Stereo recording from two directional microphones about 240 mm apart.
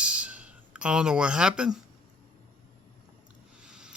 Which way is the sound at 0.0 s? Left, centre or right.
Centre.